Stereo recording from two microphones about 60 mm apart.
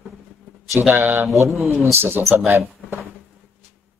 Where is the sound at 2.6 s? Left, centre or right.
Right.